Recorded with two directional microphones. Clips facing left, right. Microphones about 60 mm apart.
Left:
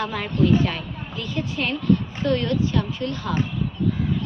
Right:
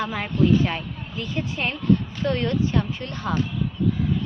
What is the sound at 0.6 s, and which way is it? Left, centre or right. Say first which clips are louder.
A woman's voice: even; right.